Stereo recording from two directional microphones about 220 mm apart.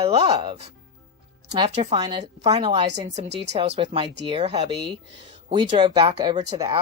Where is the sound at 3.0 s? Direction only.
30° right (ahead or behind).